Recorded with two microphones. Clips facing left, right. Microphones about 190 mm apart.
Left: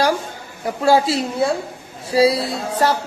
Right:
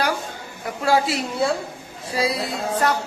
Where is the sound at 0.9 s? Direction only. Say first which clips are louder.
Left 4 dB; 30° left (ahead or behind).